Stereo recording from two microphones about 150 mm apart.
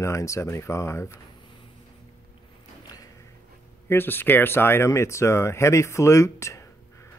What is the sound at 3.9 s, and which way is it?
Speech, 15° left (ahead or behind).